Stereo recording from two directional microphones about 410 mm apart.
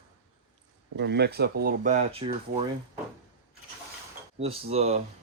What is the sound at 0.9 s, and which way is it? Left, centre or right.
Speech, right.